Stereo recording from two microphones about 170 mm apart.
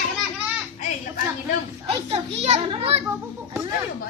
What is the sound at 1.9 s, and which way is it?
A child's voice, 40° right (ahead or behind).